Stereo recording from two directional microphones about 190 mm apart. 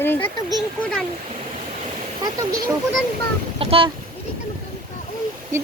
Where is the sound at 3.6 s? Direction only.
30° right (ahead or behind).